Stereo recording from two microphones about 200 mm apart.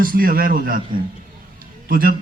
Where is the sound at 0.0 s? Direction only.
45° right (ahead or behind).